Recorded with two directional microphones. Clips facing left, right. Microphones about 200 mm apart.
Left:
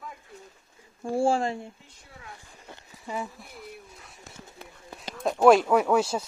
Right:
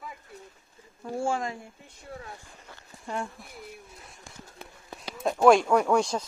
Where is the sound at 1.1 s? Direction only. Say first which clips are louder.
Left 5 dB; 30° left (ahead or behind).